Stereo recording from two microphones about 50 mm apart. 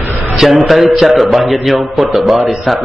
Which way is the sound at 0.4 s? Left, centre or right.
Centre.